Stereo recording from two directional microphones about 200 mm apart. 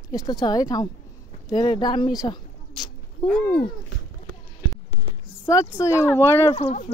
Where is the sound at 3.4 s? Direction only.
25° left (ahead or behind).